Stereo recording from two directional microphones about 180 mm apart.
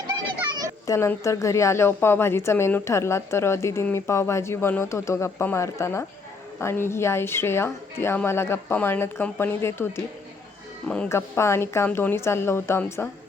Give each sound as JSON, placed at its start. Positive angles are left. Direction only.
{"t": 0.1, "sound": "children playing", "side_deg": -25}
{"t": 0.9, "sound": "a woman's voice", "side_deg": 15}